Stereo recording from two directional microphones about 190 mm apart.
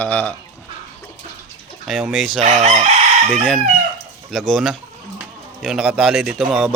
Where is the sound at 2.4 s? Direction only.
35° right (ahead or behind).